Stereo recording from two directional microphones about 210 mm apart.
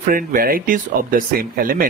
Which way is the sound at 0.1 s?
40° right (ahead or behind).